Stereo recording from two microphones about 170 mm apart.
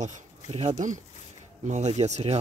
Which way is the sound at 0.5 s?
40° right (ahead or behind).